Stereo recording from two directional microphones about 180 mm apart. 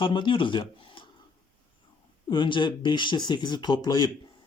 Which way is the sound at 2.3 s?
25° left (ahead or behind).